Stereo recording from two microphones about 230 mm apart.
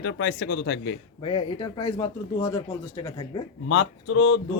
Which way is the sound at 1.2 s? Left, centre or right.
Left.